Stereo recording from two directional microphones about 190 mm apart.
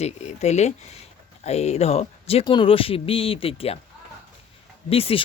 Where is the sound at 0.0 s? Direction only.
35° left (ahead or behind).